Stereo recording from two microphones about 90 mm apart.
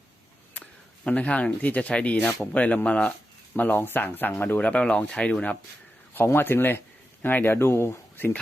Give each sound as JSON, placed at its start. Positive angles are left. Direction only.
{"t": 0.5, "sound": "speech", "side_deg": 15}
{"t": 6.1, "sound": "speech", "side_deg": 25}